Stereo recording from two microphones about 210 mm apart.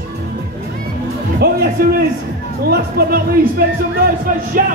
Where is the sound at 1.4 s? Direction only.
45° right (ahead or behind).